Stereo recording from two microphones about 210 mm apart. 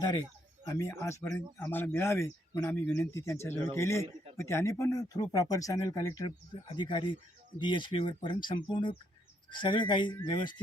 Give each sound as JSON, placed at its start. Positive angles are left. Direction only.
{"t": 0.7, "sound": "speech", "side_deg": 15}